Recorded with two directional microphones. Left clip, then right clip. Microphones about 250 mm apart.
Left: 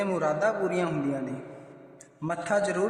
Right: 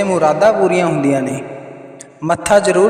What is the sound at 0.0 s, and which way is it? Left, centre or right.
Mantra, right.